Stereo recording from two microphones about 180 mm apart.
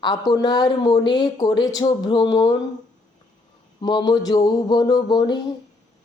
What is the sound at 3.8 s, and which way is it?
Speech, 25° left (ahead or behind).